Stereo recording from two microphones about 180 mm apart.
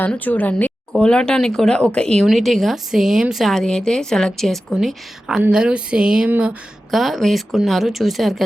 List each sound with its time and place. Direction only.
0.0 s speech: 10° left (ahead or behind)